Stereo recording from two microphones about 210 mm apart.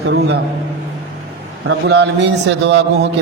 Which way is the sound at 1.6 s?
55° right (ahead or behind).